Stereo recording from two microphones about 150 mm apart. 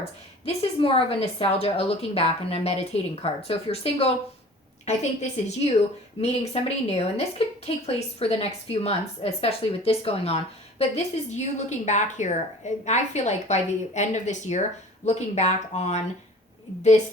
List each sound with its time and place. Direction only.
0.0 s a woman's voice: 40° left (ahead or behind)